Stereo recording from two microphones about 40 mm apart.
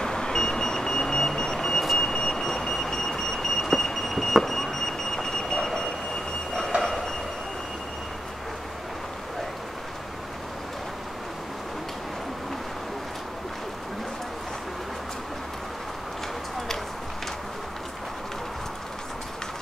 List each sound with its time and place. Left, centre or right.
0.0 s vehicle: centre
2.7 s a sound: centre
6.8 s train: centre